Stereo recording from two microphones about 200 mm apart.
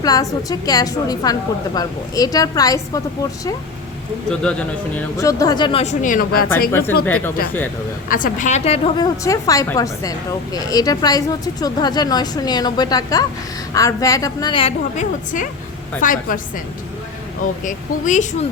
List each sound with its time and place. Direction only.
0.0 s a woman's voice: 20° left (ahead or behind)
4.9 s a woman's voice: 15° left (ahead or behind); by 6.5 s 45° left (ahead or behind)
6.7 s a woman's voice: 10° left (ahead or behind)
8.1 s a woman's voice: 40° left (ahead or behind)
16.0 s a woman's voice: 45° left (ahead or behind)
17.6 s a woman's voice: 40° left (ahead or behind)